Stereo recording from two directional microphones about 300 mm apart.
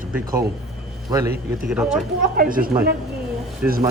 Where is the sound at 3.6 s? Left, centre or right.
Centre.